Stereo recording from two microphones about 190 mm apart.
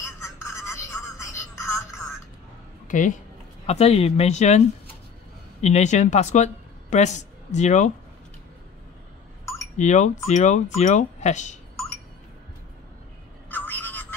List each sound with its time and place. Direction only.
0.0 s telephone: 15° left (ahead or behind)
2.9 s speech: 40° left (ahead or behind)
9.8 s speech: 40° left (ahead or behind)
13.5 s telephone: 10° left (ahead or behind)